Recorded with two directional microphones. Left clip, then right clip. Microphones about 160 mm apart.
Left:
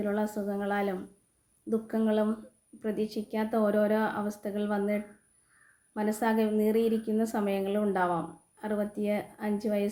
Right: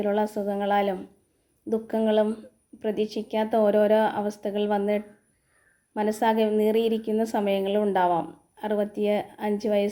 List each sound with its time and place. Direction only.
0.0 s a woman's voice: 20° right (ahead or behind)